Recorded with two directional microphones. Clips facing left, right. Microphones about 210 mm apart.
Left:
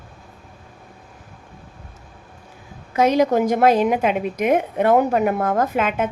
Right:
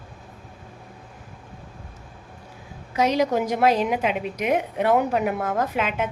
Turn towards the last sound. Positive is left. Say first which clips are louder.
# left 4 dB
turn(degrees=50)  # may be behind; listen again after turning